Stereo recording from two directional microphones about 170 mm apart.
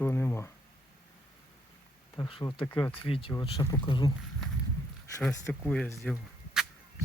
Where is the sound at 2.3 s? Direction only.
30° left (ahead or behind).